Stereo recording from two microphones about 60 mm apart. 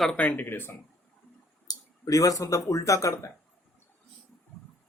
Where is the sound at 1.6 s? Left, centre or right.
Left.